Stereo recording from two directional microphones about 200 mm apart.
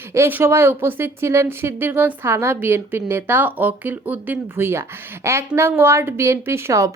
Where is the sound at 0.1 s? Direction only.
10° right (ahead or behind).